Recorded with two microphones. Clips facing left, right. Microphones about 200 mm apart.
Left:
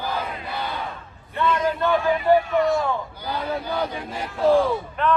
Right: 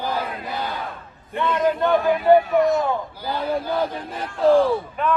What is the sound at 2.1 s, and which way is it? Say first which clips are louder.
Speech: right 4 dB; centre (ahead or behind).